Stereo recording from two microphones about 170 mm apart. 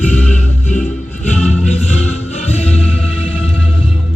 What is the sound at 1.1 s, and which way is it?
Music, 40° left (ahead or behind).